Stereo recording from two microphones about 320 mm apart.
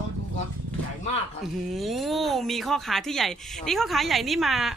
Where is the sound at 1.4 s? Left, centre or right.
Centre.